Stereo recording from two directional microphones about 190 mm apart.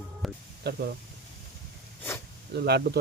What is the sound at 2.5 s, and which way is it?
Speech, 55° right (ahead or behind).